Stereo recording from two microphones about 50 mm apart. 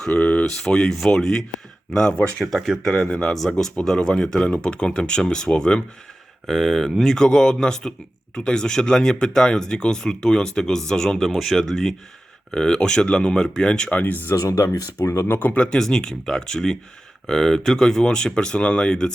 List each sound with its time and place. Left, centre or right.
0.2 s a sound: left
0.4 s speech: centre
6.5 s speech: centre
13.9 s speech: left
14.3 s speech: left
15.3 s speech: left
15.5 s speech: centre